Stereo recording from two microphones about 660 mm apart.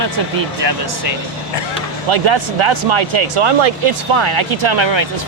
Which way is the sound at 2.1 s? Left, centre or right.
Right.